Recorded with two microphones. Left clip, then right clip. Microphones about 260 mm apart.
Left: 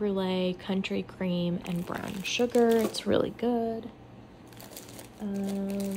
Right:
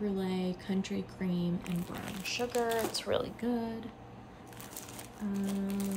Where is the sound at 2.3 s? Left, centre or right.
Left.